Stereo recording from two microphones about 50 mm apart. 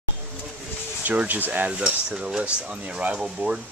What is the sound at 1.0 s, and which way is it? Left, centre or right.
Speech, right.